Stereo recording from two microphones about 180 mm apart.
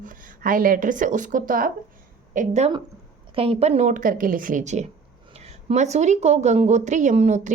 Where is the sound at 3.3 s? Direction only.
35° right (ahead or behind).